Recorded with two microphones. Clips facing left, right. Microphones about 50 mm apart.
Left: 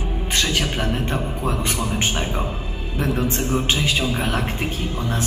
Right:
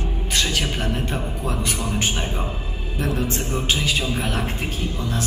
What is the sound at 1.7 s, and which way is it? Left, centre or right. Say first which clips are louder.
Speech: left 2 dB; centre.